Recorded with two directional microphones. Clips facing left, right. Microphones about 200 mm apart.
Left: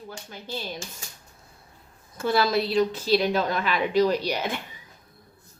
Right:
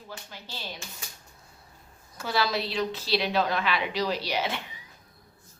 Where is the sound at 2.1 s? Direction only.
50° left (ahead or behind).